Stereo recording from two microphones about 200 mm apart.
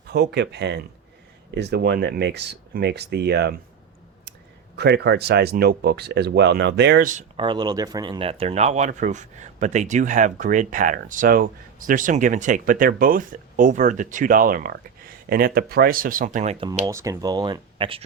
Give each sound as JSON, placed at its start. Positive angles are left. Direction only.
{"t": 0.1, "sound": "speech", "side_deg": -55}
{"t": 4.8, "sound": "speech", "side_deg": -55}
{"t": 7.0, "sound": "speech", "side_deg": -40}
{"t": 7.3, "sound": "speech", "side_deg": -25}
{"t": 16.8, "sound": "speech", "side_deg": -15}